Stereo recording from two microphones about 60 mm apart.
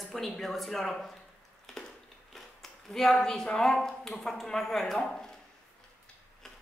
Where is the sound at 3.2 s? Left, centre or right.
Centre.